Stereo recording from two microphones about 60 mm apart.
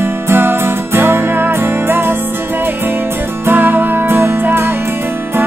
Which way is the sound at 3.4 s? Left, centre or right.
Right.